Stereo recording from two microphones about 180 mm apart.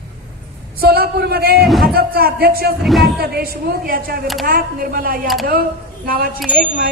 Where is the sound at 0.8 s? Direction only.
60° right (ahead or behind).